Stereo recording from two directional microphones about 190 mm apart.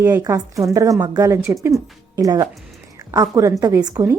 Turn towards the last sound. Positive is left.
turn(degrees=-15)  # may be behind; listen again after turning